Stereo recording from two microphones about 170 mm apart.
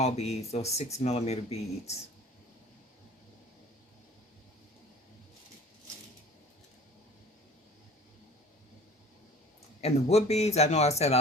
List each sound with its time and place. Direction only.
0.0 s speech: 40° left (ahead or behind)
9.8 s speech: 40° left (ahead or behind)